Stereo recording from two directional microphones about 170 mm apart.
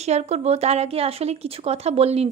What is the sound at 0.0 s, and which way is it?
A woman's voice, 40° right (ahead or behind).